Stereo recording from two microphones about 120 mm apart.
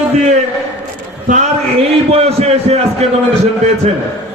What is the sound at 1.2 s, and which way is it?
Speech, 80° right.